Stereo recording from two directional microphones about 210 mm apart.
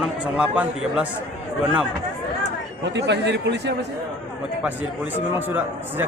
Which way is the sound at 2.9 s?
55° right (ahead or behind).